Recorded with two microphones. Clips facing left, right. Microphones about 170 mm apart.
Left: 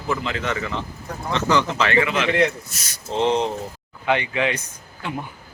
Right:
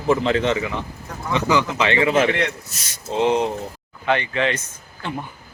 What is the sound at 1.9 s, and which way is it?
Speech, 30° right (ahead or behind).